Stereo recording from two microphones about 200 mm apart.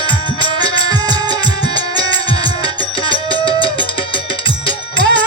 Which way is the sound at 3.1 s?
25° left (ahead or behind).